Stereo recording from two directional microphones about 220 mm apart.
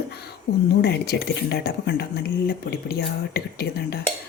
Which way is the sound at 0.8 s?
50° left (ahead or behind).